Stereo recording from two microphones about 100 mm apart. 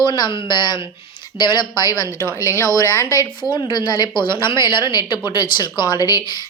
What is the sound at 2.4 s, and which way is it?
A woman's voice, 30° left (ahead or behind).